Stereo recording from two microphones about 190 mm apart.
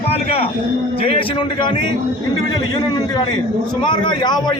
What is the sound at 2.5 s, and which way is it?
A man's voice, 20° left (ahead or behind).